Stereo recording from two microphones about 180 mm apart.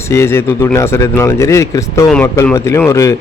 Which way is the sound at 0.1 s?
15° left (ahead or behind).